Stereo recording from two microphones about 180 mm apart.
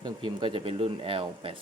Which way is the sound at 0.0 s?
25° right (ahead or behind).